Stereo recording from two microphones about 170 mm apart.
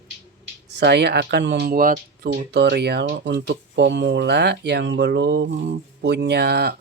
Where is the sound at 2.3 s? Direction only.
80° right.